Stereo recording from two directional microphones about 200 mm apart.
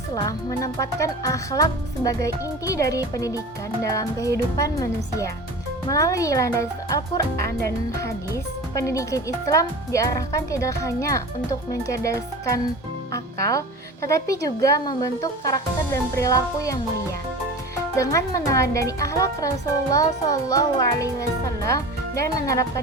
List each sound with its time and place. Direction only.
0.1 s speech: 15° left (ahead or behind)
17.9 s speech: 15° left (ahead or behind)